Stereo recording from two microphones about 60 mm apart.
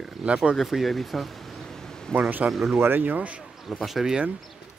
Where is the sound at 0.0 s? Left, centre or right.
Centre.